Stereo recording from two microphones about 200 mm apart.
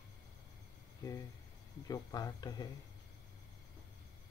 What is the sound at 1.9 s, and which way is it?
Speech, 20° left (ahead or behind).